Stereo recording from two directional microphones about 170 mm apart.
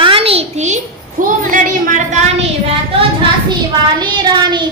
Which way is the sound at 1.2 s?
55° right (ahead or behind).